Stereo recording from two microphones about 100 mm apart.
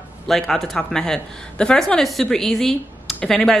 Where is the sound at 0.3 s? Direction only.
5° left (ahead or behind).